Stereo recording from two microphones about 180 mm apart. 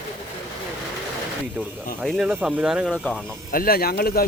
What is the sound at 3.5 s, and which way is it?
Speech, 55° left (ahead or behind).